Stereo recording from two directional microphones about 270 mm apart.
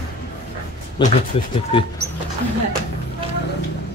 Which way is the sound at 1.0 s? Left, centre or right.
Centre.